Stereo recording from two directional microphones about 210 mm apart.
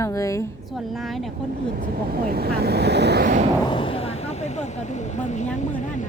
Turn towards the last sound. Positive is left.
turn(degrees=35)  # may be behind; listen again after turning